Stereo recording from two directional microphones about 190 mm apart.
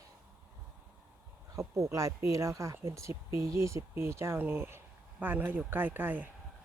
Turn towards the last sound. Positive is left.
turn(degrees=-10)  # may be behind; listen again after turning